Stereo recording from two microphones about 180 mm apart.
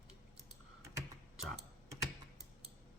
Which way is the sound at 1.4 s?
Centre (ahead or behind).